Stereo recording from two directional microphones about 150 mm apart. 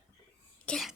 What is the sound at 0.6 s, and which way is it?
Cough, 5° left (ahead or behind).